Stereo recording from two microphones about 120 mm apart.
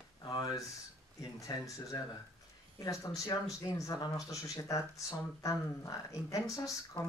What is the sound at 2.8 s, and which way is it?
Speech, 30° left (ahead or behind).